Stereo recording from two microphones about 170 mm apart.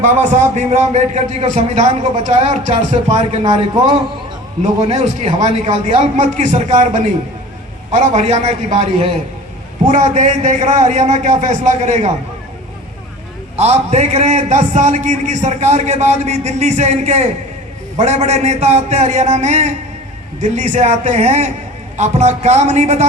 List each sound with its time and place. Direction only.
0.0 s a man's voice: 45° right (ahead or behind)
4.6 s a man's voice: 40° right (ahead or behind)
13.6 s a man's voice: 40° right (ahead or behind)